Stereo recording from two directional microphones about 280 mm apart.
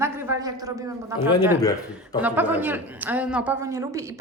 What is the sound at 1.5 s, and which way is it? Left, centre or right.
Speech, centre.